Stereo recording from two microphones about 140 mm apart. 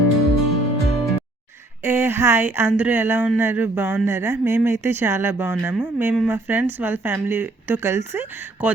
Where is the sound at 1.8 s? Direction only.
15° right (ahead or behind).